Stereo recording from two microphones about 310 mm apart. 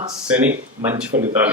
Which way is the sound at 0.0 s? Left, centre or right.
Centre.